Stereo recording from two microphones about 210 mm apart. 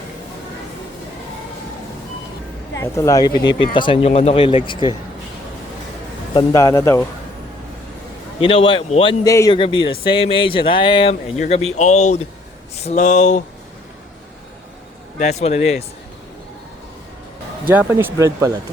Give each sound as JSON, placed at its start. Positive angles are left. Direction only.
{"t": 2.7, "sound": "speech", "side_deg": 15}
{"t": 6.3, "sound": "speech", "side_deg": 15}
{"t": 8.4, "sound": "speech", "side_deg": 25}
{"t": 15.2, "sound": "speech", "side_deg": 30}
{"t": 17.7, "sound": "speech", "side_deg": -10}